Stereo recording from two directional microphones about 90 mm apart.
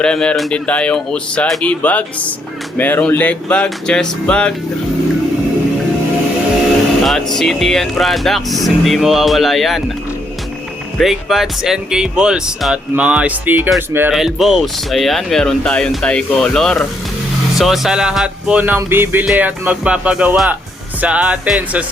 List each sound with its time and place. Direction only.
0.0 s speech: 10° left (ahead or behind)
7.0 s speech: 5° left (ahead or behind)
10.9 s speech: 5° right (ahead or behind); by 13.7 s 20° right (ahead or behind)
13.7 s music: 25° right (ahead or behind)
14.1 s speech: 5° right (ahead or behind)
17.6 s speech: 5° right (ahead or behind)
18.5 s speech: 15° right (ahead or behind)
18.8 s music: 25° right (ahead or behind)
19.4 s speech: 15° right (ahead or behind)